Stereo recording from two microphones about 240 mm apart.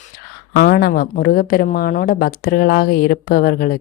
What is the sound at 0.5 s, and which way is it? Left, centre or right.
Speech, left.